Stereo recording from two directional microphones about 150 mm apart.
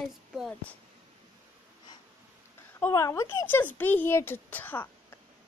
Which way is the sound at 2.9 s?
20° left (ahead or behind).